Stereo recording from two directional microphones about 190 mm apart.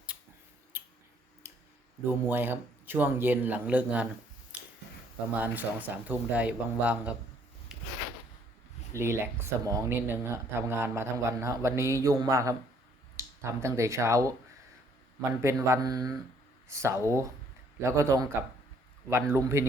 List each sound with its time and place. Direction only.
0.7 s a sound: 10° right (ahead or behind)
2.0 s speech: 10° right (ahead or behind)
5.3 s speech: 10° right (ahead or behind)
7.7 s a sound: 5° right (ahead or behind)
9.0 s speech: 15° right (ahead or behind)
19.3 s speech: 15° right (ahead or behind)